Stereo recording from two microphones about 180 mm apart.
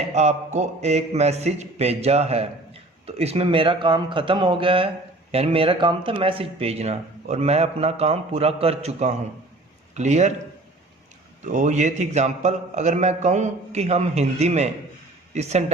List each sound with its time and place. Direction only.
0.1 s a man's voice: 40° right (ahead or behind)
11.4 s a man's voice: 40° right (ahead or behind)